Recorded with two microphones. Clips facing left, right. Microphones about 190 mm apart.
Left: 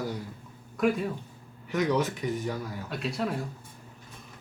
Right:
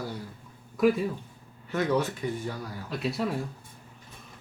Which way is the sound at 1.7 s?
15° left (ahead or behind).